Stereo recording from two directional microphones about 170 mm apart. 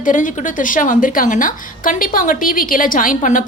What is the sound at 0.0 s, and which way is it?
A woman's voice, 50° left (ahead or behind).